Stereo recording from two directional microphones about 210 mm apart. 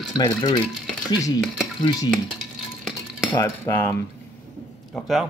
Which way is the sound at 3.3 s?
15° left (ahead or behind).